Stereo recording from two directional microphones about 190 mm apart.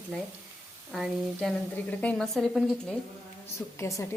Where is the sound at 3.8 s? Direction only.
15° left (ahead or behind).